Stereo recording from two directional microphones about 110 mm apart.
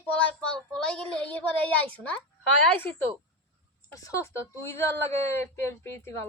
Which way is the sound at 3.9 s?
30° left (ahead or behind).